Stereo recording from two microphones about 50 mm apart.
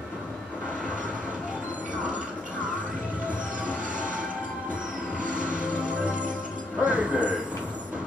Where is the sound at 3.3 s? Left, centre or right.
Right.